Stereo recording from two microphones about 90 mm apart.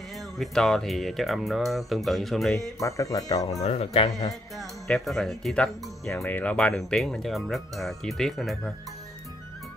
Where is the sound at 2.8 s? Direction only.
40° left (ahead or behind).